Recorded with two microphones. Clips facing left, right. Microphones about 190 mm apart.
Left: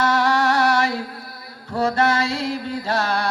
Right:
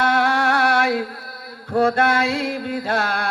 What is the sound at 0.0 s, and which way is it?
Music, 55° right (ahead or behind).